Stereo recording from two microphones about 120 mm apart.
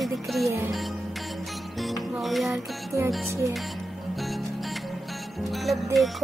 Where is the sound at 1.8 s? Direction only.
Centre (ahead or behind).